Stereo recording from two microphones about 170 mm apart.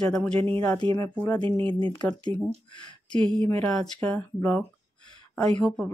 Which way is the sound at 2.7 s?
25° left (ahead or behind).